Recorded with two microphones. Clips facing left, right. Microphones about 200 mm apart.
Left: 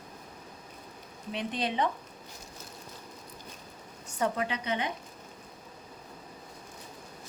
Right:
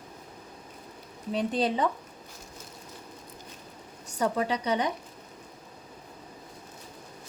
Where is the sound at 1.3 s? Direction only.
40° right (ahead or behind).